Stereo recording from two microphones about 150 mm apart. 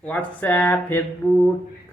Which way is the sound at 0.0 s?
10° left (ahead or behind).